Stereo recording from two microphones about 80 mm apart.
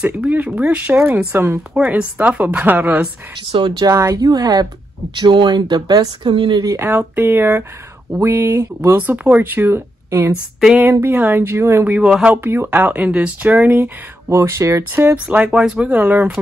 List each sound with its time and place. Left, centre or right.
0.0 s speech: centre
1.7 s speech: centre
3.5 s speech: right
3.9 s speech: right
4.2 s speech: right
5.2 s speech: right
7.0 s speech: right
11.8 s speech: centre
12.4 s speech: right
14.3 s speech: right
14.8 s speech: right; by 15.9 s centre
15.9 s speech: right